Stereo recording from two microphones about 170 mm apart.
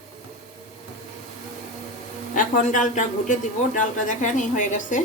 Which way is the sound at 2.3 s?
50° left (ahead or behind).